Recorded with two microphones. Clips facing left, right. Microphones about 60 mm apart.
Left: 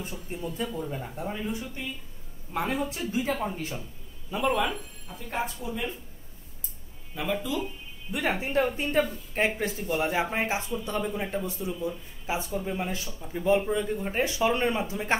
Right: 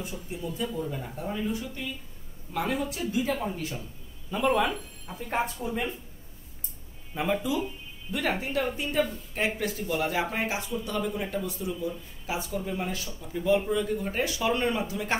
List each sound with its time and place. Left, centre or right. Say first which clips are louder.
0.3 s speech: even; left
0.7 s speech: even; left
2.5 s speech: even; left
4.3 s speech: right 1 dB; centre
5.3 s speech: right 2 dB; right
7.2 s speech: right 2 dB; centre
8.1 s speech: left 1 dB; left
8.7 s speech: left 2 dB; left
9.6 s speech: left 1 dB; left